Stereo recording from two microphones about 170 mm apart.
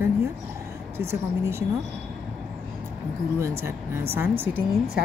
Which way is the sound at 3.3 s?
15° right (ahead or behind).